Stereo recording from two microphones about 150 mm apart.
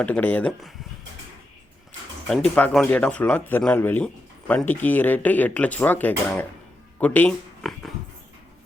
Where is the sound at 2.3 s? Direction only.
5° left (ahead or behind).